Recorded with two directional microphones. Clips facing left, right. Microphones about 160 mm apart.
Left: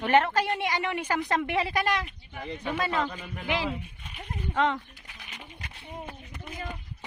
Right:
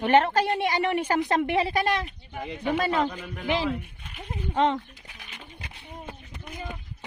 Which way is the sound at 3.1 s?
Centre (ahead or behind).